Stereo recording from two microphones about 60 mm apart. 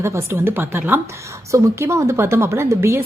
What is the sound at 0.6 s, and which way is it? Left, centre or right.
Speech, right.